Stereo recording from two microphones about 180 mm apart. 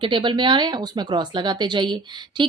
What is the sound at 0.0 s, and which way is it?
A woman's voice, 25° right (ahead or behind).